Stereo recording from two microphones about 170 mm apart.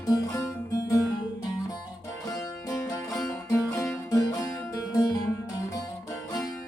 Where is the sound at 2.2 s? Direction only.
20° left (ahead or behind).